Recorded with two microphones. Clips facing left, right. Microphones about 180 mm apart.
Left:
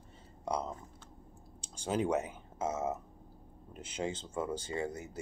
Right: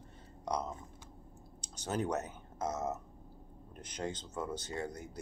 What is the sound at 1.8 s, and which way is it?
Speech, 10° left (ahead or behind).